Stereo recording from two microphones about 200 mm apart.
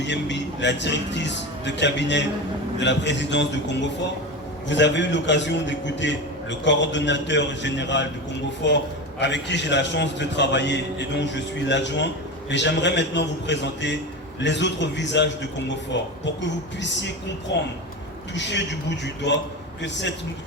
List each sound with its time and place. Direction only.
0.0 s a man's voice: 60° left (ahead or behind)